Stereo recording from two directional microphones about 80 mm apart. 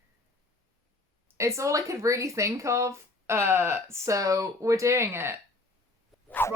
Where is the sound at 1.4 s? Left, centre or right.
Right.